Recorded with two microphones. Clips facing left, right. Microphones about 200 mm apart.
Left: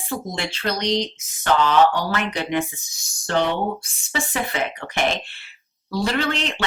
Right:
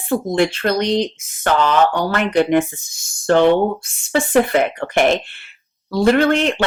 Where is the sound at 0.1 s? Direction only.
55° right (ahead or behind).